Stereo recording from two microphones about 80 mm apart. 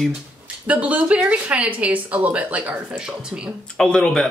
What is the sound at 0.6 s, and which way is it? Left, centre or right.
Speech, centre.